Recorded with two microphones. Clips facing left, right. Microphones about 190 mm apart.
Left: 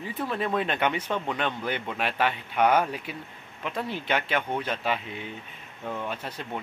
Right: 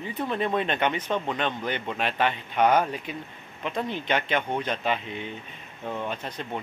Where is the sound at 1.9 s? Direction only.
10° left (ahead or behind).